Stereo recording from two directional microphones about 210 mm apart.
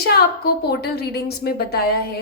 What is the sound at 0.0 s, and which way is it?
A woman's voice, 50° left (ahead or behind).